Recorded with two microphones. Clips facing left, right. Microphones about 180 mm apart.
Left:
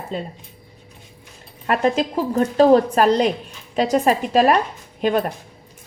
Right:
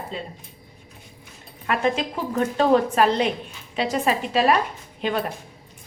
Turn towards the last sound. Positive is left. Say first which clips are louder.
# left 6 dB
turn(degrees=45)  # may be behind; listen again after turning